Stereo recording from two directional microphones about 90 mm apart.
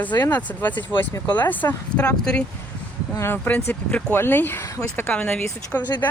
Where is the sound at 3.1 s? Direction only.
25° left (ahead or behind).